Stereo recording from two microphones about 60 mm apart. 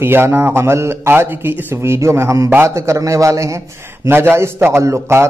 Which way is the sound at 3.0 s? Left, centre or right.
Right.